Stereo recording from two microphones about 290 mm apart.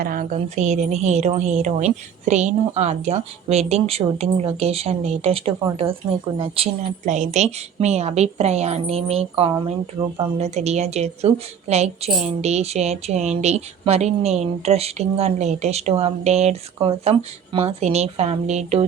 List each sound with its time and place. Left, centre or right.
0.0 s a woman's voice: right